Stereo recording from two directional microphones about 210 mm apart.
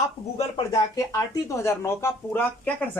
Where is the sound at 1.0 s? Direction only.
15° left (ahead or behind).